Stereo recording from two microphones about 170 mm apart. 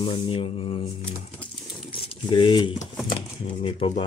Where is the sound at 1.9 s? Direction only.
30° left (ahead or behind).